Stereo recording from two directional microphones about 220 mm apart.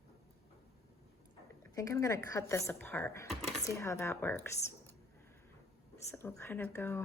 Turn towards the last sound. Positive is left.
turn(degrees=10)  # may be behind; listen again after turning